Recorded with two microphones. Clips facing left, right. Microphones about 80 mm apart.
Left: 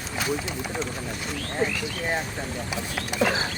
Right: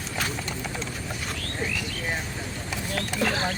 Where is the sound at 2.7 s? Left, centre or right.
Centre.